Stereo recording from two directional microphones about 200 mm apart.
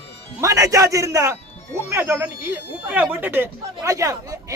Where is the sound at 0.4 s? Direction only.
15° right (ahead or behind).